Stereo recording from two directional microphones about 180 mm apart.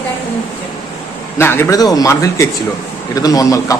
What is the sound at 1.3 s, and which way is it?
A man's voice, 15° left (ahead or behind).